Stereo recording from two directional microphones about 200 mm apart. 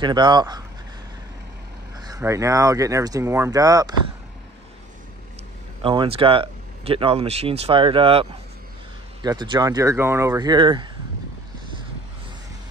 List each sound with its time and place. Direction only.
0.0 s speech: 20° right (ahead or behind)
2.0 s speech: 15° right (ahead or behind)
5.8 s speech: 25° right (ahead or behind)